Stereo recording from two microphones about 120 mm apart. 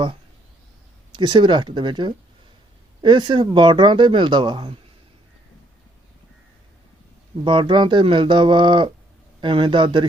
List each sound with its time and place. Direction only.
1.1 s speech: 40° right (ahead or behind)
7.4 s speech: 45° right (ahead or behind)